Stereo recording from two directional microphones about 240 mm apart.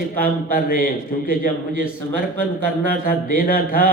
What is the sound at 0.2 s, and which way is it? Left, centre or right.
A man's voice, left.